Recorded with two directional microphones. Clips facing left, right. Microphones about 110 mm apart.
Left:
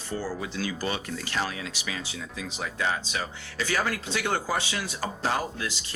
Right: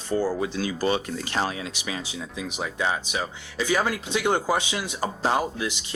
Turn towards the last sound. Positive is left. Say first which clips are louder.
# right 4 dB
turn(degrees=-20)  # may be behind; listen again after turning